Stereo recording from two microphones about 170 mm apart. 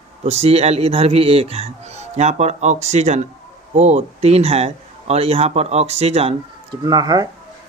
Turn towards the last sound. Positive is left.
turn(degrees=-20)  # may be behind; listen again after turning